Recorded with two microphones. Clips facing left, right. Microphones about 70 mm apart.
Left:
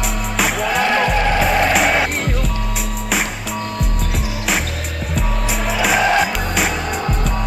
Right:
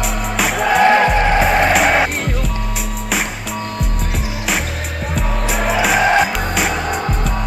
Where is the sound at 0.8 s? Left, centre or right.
Right.